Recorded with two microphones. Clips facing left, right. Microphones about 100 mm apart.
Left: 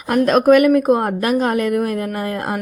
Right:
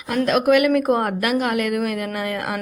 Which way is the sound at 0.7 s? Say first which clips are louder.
Left 3 dB; 20° left (ahead or behind).